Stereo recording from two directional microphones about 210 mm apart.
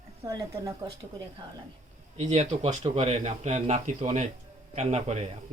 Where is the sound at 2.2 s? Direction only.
30° right (ahead or behind).